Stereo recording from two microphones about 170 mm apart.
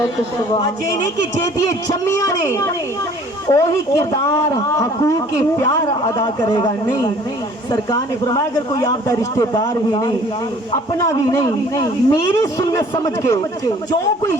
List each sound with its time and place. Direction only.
0.5 s a man's voice: 20° left (ahead or behind)